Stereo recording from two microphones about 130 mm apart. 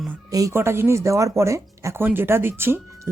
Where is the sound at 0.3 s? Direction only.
25° right (ahead or behind).